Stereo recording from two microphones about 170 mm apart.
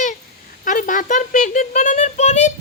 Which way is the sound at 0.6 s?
50° left (ahead or behind).